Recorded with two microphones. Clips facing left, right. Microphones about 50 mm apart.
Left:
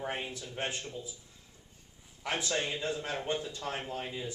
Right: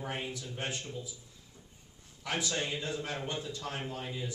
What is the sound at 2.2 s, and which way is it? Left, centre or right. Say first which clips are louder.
Speech: even; left.